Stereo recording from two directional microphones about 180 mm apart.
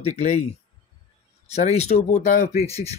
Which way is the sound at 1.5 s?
35° left (ahead or behind).